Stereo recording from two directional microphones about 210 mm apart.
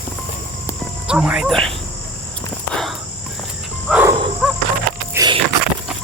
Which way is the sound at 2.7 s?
Centre (ahead or behind).